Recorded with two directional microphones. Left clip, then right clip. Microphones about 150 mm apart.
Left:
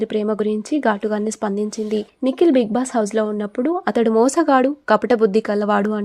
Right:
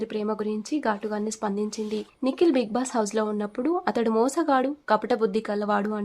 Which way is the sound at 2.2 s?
20° left (ahead or behind).